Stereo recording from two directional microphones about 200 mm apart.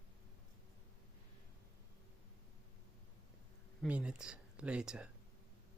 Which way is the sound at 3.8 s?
5° right (ahead or behind).